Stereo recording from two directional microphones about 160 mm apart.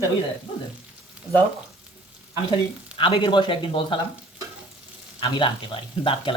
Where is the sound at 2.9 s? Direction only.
35° left (ahead or behind).